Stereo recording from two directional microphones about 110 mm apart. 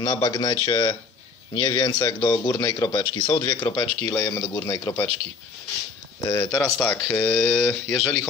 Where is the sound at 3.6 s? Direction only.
35° left (ahead or behind).